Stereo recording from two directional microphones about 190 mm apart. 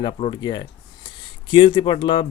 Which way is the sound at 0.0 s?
25° left (ahead or behind).